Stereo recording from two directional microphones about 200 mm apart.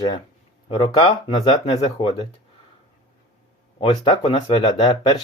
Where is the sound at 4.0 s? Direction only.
30° left (ahead or behind).